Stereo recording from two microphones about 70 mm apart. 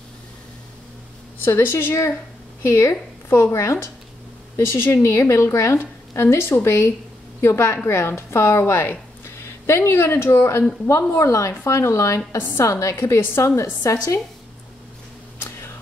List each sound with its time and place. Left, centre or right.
1.4 s a woman's voice: left
6.1 s a woman's voice: left
12.6 s a woman's voice: left
13.9 s a woman's voice: left
15.3 s a sound: left